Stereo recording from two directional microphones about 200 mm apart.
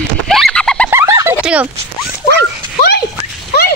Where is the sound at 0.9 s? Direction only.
15° right (ahead or behind).